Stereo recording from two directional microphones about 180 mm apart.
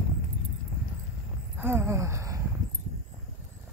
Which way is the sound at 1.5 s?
15° right (ahead or behind).